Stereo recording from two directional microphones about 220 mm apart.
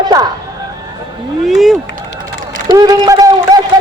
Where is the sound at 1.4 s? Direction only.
Centre (ahead or behind).